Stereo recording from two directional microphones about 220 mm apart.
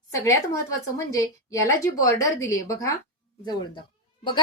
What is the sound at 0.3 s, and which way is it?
A woman's voice, 15° left (ahead or behind).